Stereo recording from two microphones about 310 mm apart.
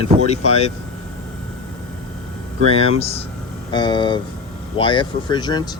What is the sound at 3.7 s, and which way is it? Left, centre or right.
Speech, centre.